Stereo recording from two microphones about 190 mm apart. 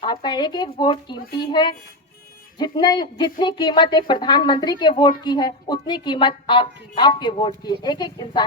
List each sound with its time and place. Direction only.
0.0 s a woman's voice: 20° left (ahead or behind)